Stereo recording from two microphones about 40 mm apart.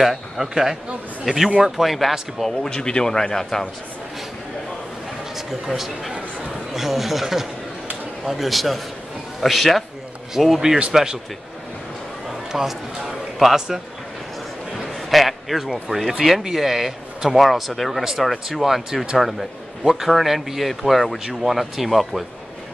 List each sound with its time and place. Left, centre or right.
0.0 s a man's voice: centre
2.6 s speech: left
5.5 s a man's voice: centre
12.5 s a man's voice: centre
14.8 s a man's voice: centre